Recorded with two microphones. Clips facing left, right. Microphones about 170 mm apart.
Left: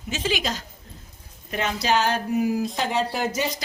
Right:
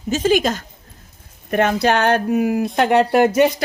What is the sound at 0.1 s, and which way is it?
A woman's voice, 45° right (ahead or behind).